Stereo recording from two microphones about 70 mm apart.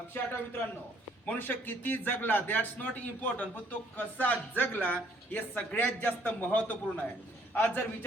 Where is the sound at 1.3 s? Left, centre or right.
Left.